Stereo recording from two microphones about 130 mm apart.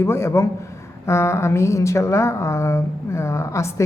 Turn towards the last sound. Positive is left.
turn(degrees=20)  # may be behind; listen again after turning